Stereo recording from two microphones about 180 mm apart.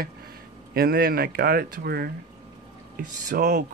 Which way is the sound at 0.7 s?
55° right (ahead or behind).